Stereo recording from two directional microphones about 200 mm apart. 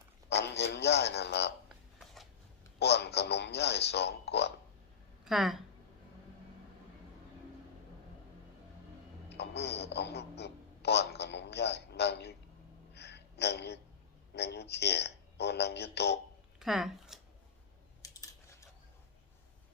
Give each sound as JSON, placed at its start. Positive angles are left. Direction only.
{"t": 0.3, "sound": "speech", "side_deg": 55}
{"t": 2.7, "sound": "speech", "side_deg": 55}
{"t": 5.2, "sound": "speech", "side_deg": 0}
{"t": 9.3, "sound": "speech", "side_deg": 55}
{"t": 12.9, "sound": "a sound", "side_deg": 55}
{"t": 14.3, "sound": "speech", "side_deg": 55}
{"t": 16.6, "sound": "speech", "side_deg": 0}
{"t": 18.0, "sound": "a sound", "side_deg": 15}